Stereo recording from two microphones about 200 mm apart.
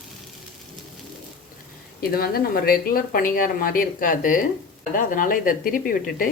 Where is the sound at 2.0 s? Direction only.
50° left (ahead or behind).